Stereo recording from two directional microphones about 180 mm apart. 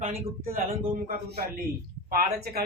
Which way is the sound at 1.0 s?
55° right (ahead or behind).